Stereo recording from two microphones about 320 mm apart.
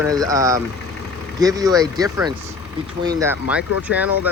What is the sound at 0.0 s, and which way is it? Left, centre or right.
Speech, centre.